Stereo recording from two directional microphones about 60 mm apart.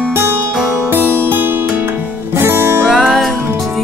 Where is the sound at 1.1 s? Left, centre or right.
Right.